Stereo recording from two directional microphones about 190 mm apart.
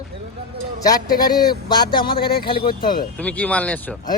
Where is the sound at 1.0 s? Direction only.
50° left (ahead or behind).